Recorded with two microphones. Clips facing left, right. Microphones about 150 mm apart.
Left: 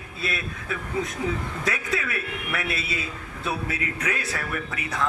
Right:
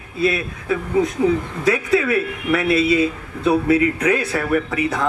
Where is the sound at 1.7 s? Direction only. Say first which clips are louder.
Right 14 dB; 25° right (ahead or behind).